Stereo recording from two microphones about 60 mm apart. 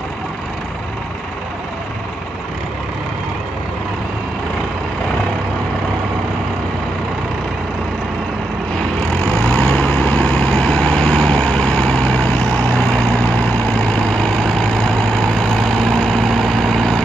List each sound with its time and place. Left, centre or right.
9.2 s vehicle: centre